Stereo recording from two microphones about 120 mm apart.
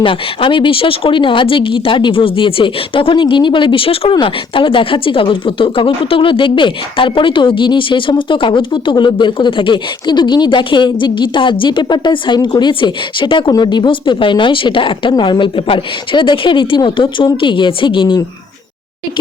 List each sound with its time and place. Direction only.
0.0 s speech: 45° left (ahead or behind)